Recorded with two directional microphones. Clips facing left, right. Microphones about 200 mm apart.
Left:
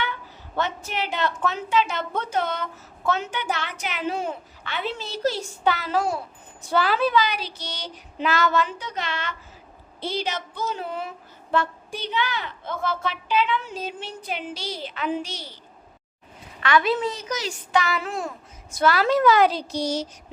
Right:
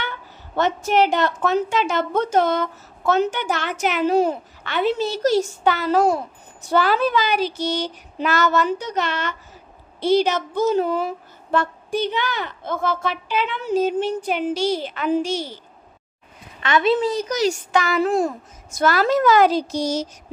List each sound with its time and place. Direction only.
0.0 s a woman's voice: 45° right (ahead or behind)
16.6 s a woman's voice: 25° right (ahead or behind)
17.1 s a woman's voice: 40° right (ahead or behind)